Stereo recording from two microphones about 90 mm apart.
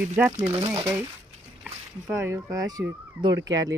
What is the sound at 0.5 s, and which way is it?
Speech, 55° right (ahead or behind).